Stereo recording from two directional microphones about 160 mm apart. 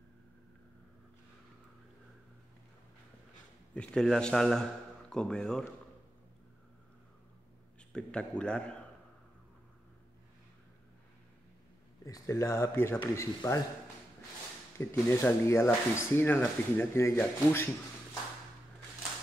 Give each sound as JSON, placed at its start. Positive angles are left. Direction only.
{"t": 3.7, "sound": "a man's voice", "side_deg": 5}
{"t": 7.9, "sound": "a man's voice", "side_deg": 5}
{"t": 12.0, "sound": "speech", "side_deg": 20}
{"t": 14.8, "sound": "speech", "side_deg": 15}